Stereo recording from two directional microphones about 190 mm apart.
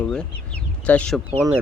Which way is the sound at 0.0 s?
5° left (ahead or behind).